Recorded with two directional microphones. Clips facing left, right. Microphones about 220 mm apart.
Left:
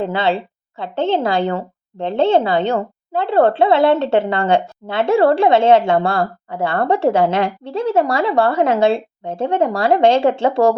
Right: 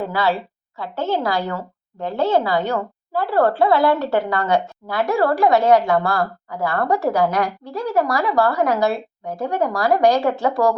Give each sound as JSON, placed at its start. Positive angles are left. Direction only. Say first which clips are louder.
{"t": 0.0, "sound": "speech", "louder": "left 3 dB", "side_deg": 25}